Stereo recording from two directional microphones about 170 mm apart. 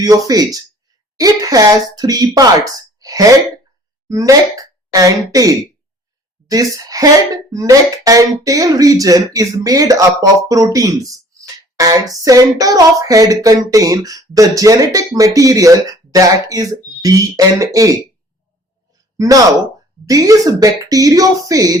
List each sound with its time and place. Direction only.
0.0 s speech: 20° right (ahead or behind)
19.1 s speech: 20° right (ahead or behind)